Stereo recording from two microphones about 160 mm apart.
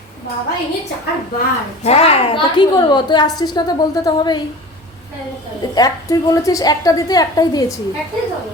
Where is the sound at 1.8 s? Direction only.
40° left (ahead or behind).